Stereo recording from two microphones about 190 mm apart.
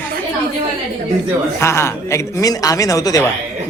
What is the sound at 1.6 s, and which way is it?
A man's voice, 15° left (ahead or behind).